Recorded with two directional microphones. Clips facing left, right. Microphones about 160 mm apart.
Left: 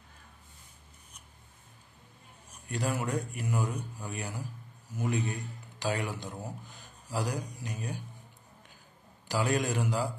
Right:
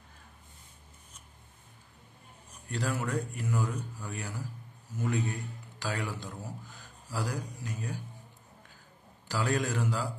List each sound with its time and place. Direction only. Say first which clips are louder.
2.7 s speech: left 1 dB; 15° left (ahead or behind)
9.3 s speech: left 1 dB; 15° left (ahead or behind)